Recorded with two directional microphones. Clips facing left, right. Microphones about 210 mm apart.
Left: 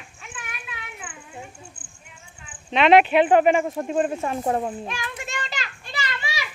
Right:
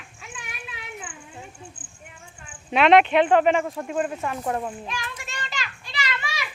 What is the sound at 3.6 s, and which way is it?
Speech, 25° left (ahead or behind).